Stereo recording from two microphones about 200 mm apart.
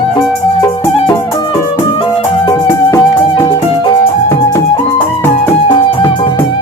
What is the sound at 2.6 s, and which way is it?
Music, 15° left (ahead or behind).